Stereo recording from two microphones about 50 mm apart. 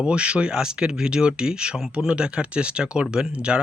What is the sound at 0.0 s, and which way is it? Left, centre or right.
Speech, right.